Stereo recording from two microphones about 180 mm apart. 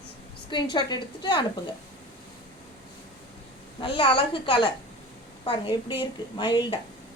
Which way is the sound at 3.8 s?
30° left (ahead or behind).